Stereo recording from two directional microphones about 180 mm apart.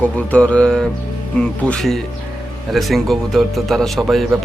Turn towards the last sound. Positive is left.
turn(degrees=0)  # may be behind; listen again after turning